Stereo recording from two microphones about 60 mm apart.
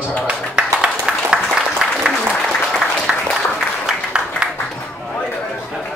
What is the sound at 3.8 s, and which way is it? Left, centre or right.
Music, centre.